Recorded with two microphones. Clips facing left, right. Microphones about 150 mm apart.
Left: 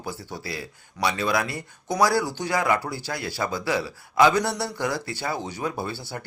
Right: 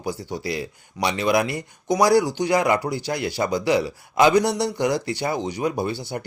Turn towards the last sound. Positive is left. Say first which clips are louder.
# right 6 dB
turn(degrees=-20)  # may be behind; listen again after turning